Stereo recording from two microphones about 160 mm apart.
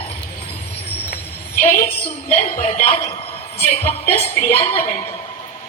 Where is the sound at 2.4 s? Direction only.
50° left (ahead or behind).